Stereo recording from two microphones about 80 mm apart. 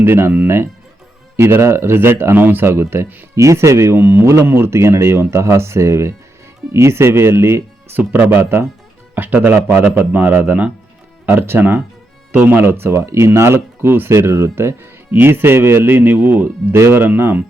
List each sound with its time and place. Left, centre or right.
0.0 s speech: right
3.3 s speech: right